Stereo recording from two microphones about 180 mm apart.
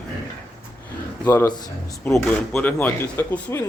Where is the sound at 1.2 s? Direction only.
15° left (ahead or behind).